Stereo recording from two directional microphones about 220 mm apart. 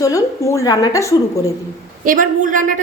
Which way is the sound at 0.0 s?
15° left (ahead or behind).